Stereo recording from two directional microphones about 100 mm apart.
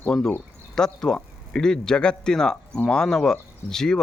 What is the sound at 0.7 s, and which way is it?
Speech, 5° left (ahead or behind).